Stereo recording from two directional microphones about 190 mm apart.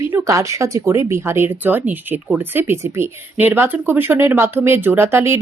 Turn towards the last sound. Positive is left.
turn(degrees=-15)  # may be behind; listen again after turning